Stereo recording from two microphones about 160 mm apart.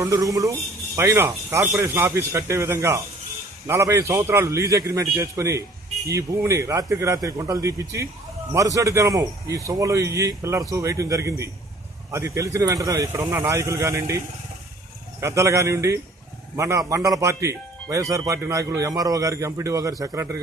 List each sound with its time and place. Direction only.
0.0 s a man's voice: 20° right (ahead or behind)